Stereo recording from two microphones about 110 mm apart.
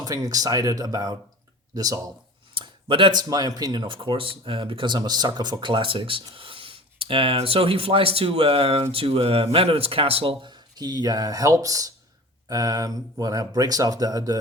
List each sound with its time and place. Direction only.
0.0 s speech: 30° right (ahead or behind)
2.9 s speech: 45° right (ahead or behind)
10.4 s speech: 40° right (ahead or behind)